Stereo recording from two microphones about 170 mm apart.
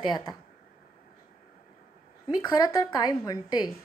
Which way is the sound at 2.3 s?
25° left (ahead or behind).